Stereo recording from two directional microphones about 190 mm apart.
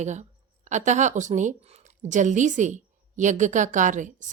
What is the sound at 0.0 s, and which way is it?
A woman's voice, 40° right (ahead or behind).